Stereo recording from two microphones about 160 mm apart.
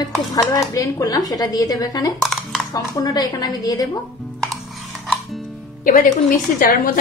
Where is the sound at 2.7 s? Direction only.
25° left (ahead or behind).